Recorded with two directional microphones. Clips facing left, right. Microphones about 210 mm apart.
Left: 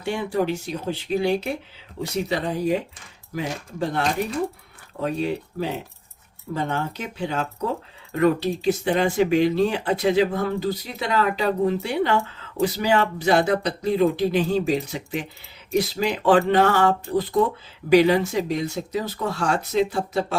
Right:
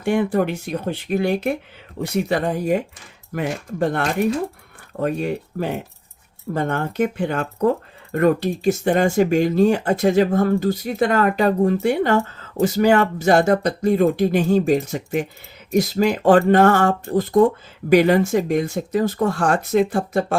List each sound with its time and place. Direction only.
0.0 s speech: 55° right (ahead or behind)